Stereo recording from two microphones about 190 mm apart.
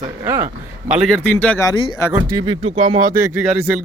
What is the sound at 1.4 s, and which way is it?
Speech, 5° left (ahead or behind).